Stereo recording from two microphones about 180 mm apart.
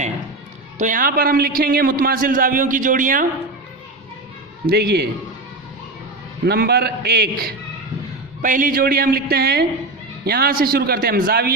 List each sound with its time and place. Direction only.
0.8 s a man's voice: 50° right (ahead or behind)
4.7 s speech: 65° right (ahead or behind)
6.4 s speech: 65° right (ahead or behind)
8.4 s speech: 45° right (ahead or behind)